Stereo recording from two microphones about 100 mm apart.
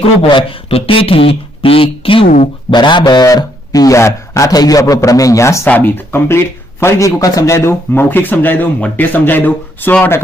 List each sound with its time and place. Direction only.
0.0 s speech: 60° left (ahead or behind)
3.2 s a man's voice: 35° left (ahead or behind)
5.6 s speech: 20° left (ahead or behind)